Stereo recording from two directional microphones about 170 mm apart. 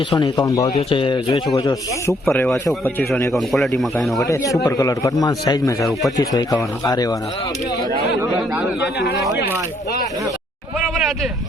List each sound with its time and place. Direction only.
0.1 s a man's voice: 25° left (ahead or behind)
0.8 s a man's voice: 30° left (ahead or behind)
2.0 s speech: 15° left (ahead or behind)
3.3 s speech: centre (ahead or behind)
4.6 s a man's voice: 20° left (ahead or behind)
10.8 s a sound: centre (ahead or behind)